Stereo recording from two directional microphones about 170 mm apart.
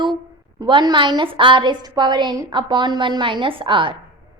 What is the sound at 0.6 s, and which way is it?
A woman's voice, 25° right (ahead or behind).